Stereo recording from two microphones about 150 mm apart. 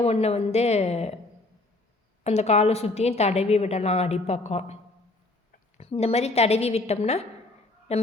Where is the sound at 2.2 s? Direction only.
45° left (ahead or behind).